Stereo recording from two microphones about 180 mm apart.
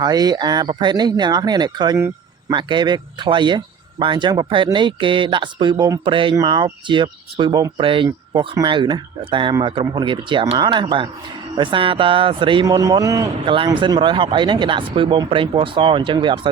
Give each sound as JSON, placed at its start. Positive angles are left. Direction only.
{"t": 0.0, "sound": "speech", "side_deg": -20}